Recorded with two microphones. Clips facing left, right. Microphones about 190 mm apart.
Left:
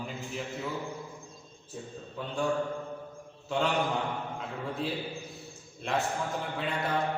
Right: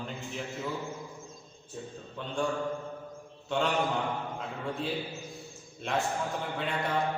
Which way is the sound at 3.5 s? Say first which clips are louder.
Even; centre (ahead or behind).